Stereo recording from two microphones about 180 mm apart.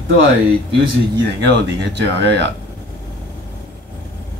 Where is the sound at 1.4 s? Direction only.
70° right (ahead or behind).